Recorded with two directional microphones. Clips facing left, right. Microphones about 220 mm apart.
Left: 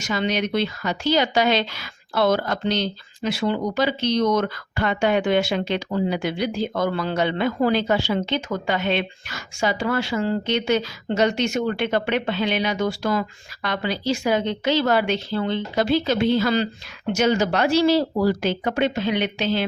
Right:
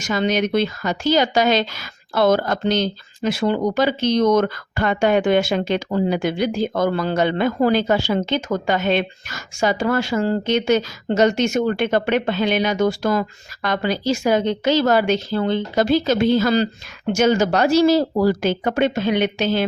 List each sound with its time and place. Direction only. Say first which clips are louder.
0.0 s speech: right 4 dB; 45° right (ahead or behind)